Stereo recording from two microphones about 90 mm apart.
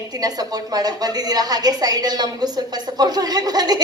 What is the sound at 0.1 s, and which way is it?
A woman's voice, 45° right (ahead or behind).